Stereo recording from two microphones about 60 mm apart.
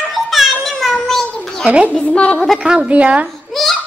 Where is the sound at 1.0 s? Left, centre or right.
Centre.